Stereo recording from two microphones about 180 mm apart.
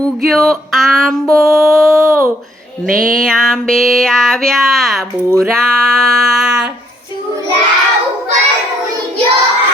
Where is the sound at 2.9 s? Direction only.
50° right (ahead or behind).